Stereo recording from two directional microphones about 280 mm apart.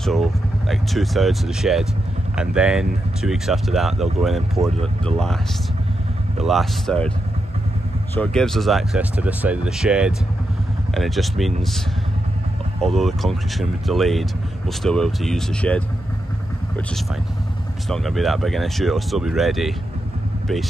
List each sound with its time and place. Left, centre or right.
0.0 s speech: centre
6.4 s speech: centre
8.1 s speech: centre
12.8 s speech: centre
17.8 s speech: centre